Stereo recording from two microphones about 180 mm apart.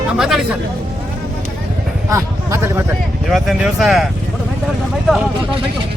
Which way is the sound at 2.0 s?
15° right (ahead or behind).